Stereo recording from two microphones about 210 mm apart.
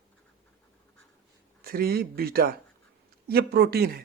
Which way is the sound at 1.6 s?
45° right (ahead or behind).